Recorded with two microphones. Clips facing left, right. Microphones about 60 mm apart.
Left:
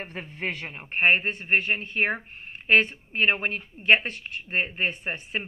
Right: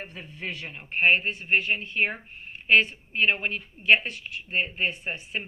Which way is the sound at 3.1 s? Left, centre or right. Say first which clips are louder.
Left 1 dB; left.